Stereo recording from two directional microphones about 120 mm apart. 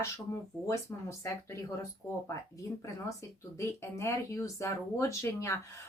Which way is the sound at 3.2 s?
25° left (ahead or behind).